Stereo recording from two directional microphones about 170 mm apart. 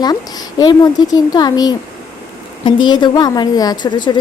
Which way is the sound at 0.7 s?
20° left (ahead or behind).